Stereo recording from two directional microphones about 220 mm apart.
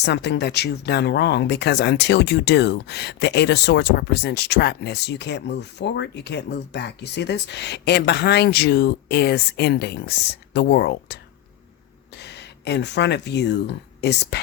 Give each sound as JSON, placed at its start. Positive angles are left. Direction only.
{"t": 0.0, "sound": "speech", "side_deg": 50}